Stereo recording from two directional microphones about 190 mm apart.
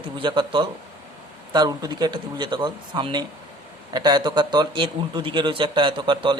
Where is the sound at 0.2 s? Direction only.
25° right (ahead or behind).